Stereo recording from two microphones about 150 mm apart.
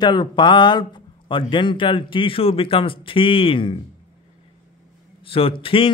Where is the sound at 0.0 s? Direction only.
30° left (ahead or behind).